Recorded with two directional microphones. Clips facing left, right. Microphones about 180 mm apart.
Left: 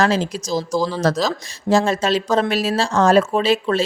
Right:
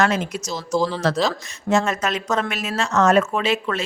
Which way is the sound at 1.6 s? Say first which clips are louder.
Left 3 dB; 30° left (ahead or behind).